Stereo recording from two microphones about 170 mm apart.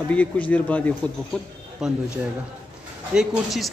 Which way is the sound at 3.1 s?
Centre (ahead or behind).